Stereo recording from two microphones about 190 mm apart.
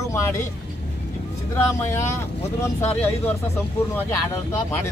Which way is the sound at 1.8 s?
15° left (ahead or behind).